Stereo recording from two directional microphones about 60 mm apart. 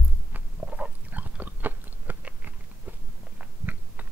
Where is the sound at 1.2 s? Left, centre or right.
Right.